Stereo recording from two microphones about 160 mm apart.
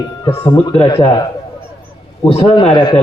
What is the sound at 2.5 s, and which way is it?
Speech, 30° left (ahead or behind).